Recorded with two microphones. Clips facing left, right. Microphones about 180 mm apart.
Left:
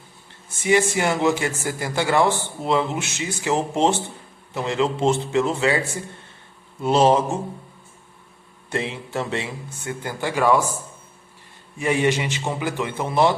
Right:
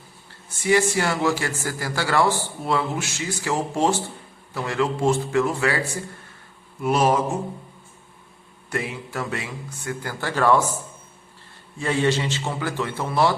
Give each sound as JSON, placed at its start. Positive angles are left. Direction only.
{"t": 0.3, "sound": "a man's voice", "side_deg": 20}
{"t": 6.8, "sound": "a man's voice", "side_deg": 25}
{"t": 8.7, "sound": "a man's voice", "side_deg": 25}
{"t": 11.8, "sound": "a man's voice", "side_deg": 15}